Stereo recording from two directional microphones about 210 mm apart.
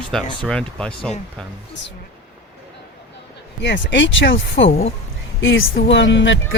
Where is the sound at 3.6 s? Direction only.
60° left (ahead or behind).